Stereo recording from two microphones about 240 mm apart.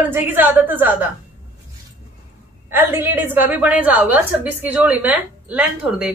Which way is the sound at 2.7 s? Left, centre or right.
Centre.